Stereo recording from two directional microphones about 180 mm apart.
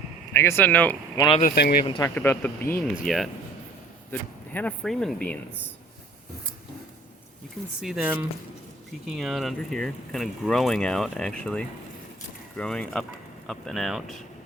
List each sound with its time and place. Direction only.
0.3 s speech: 15° left (ahead or behind)
1.5 s speech: 60° left (ahead or behind)
1.8 s speech: 30° left (ahead or behind)
2.0 s speech: 10° left (ahead or behind)
4.1 s speech: 10° left (ahead or behind)
7.8 s speech: 5° right (ahead or behind)